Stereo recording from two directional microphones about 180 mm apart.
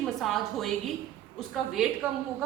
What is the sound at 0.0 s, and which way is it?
A woman's voice, centre (ahead or behind).